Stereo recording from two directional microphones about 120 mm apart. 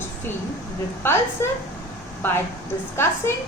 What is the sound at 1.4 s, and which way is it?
A woman's voice, 20° left (ahead or behind).